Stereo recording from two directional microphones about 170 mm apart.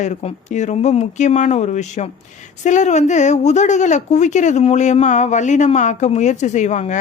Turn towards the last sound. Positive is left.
turn(degrees=45)  # may be behind; listen again after turning